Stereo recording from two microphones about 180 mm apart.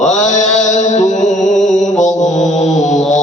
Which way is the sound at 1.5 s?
Centre (ahead or behind).